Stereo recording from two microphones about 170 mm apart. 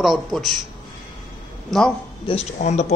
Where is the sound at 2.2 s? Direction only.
40° left (ahead or behind).